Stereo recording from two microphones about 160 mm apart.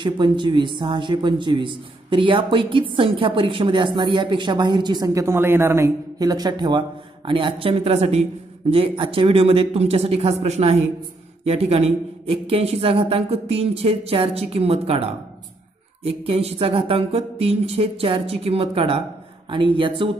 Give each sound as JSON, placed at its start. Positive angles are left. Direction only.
{"t": 0.0, "sound": "a woman's voice", "side_deg": -30}